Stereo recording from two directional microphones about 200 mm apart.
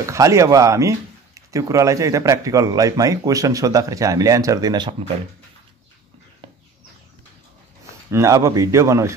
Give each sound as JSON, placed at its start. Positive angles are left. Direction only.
{"t": 0.0, "sound": "speech", "side_deg": -15}
{"t": 8.1, "sound": "speech", "side_deg": -15}